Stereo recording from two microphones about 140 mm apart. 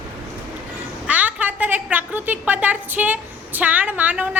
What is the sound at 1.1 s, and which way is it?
A woman's voice, 10° right (ahead or behind).